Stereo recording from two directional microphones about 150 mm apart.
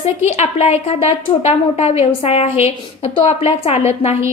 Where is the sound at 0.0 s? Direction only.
45° left (ahead or behind).